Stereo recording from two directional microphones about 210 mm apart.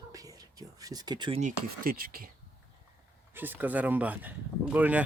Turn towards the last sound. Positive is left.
turn(degrees=-5)  # may be behind; listen again after turning